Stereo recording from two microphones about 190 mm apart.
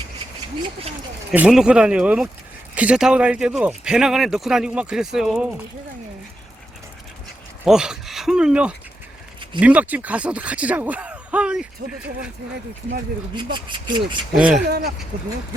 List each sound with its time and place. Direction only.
0.6 s speech: 30° right (ahead or behind)
1.3 s speech: 5° right (ahead or behind)
7.6 s speech: 5° right (ahead or behind)
13.3 s speech: 25° right (ahead or behind)
14.3 s speech: 5° right (ahead or behind)
14.7 s speech: 55° right (ahead or behind)